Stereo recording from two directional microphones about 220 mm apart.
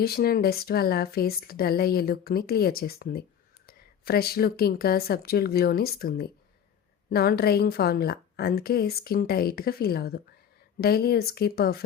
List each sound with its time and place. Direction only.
0.0 s speech: 45° left (ahead or behind)